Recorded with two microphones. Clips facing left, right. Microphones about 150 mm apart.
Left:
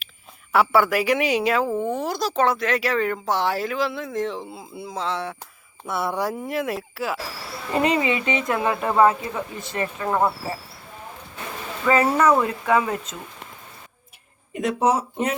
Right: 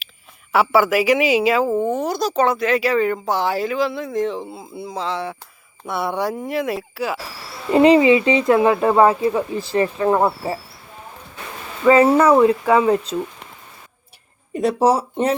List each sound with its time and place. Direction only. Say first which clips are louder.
0.5 s speech: right 3 dB; centre (ahead or behind)
7.7 s speech: right 9 dB; 25° right (ahead or behind)
11.9 s speech: right 6 dB; 25° right (ahead or behind)
14.5 s speech: right 4 dB; 35° right (ahead or behind)